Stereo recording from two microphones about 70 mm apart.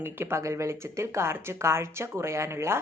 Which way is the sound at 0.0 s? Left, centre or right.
Right.